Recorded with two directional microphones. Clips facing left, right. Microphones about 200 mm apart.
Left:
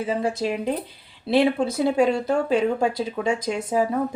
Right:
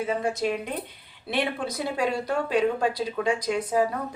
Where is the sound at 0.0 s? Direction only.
30° left (ahead or behind).